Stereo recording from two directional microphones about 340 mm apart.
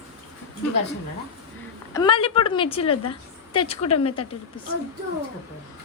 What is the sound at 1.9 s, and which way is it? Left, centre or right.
A woman's voice, centre.